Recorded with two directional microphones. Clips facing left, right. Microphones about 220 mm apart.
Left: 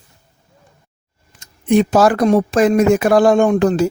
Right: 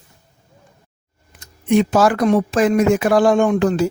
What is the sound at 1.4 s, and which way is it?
Speech, 35° left (ahead or behind).